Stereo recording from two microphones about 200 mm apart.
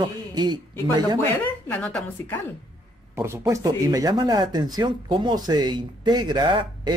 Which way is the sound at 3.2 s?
15° right (ahead or behind).